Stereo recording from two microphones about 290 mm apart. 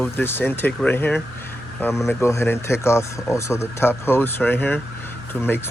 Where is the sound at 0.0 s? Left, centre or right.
Centre.